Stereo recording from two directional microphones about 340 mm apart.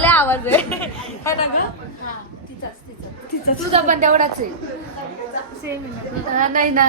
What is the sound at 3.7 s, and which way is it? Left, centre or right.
Speech, right.